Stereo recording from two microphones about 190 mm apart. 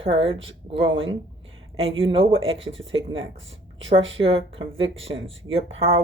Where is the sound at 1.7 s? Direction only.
30° right (ahead or behind).